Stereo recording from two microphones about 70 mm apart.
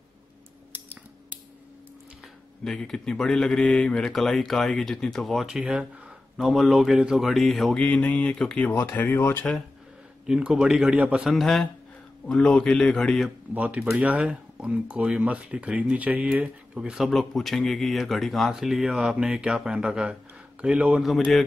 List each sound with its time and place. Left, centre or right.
2.6 s speech: centre
7.7 s a man's voice: centre
10.5 s speech: centre
11.2 s a man's voice: centre
13.6 s speech: right
17.0 s speech: centre